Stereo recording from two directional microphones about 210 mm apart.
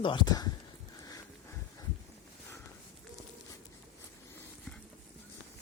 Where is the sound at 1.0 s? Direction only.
15° left (ahead or behind).